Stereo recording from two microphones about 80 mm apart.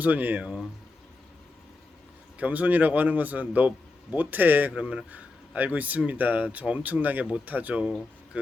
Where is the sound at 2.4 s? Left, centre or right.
Centre.